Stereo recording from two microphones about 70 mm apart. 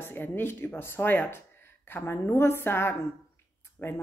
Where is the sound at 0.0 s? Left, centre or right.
Left.